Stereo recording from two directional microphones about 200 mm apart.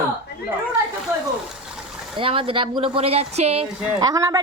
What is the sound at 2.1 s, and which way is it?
Speech, 25° right (ahead or behind).